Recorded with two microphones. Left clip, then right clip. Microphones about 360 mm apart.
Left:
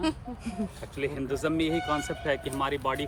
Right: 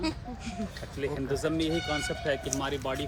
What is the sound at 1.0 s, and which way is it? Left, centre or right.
Speech, left.